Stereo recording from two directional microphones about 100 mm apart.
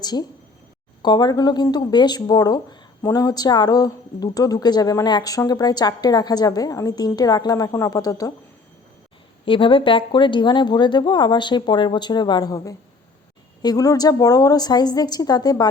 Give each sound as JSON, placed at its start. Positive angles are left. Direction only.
{"t": 0.0, "sound": "a woman's voice", "side_deg": 45}
{"t": 9.5, "sound": "a woman's voice", "side_deg": 55}
{"t": 13.6, "sound": "a woman's voice", "side_deg": 40}